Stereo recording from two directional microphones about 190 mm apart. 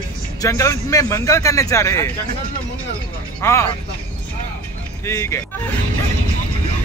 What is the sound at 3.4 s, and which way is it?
Speech, 15° left (ahead or behind).